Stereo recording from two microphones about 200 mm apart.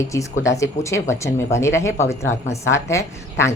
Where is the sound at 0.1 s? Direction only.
15° left (ahead or behind).